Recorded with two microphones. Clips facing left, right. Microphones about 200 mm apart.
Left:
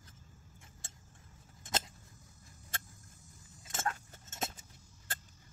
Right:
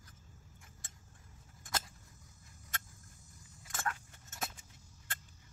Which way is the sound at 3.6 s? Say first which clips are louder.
Left 2 dB; 25° left (ahead or behind).